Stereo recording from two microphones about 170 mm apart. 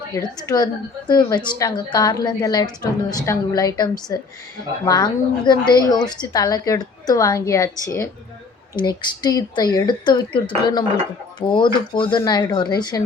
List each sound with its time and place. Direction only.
0.1 s a woman's voice: 20° left (ahead or behind)
8.7 s a woman's voice: 25° left (ahead or behind)